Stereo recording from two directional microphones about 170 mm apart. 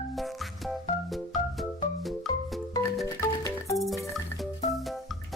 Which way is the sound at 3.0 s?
20° left (ahead or behind).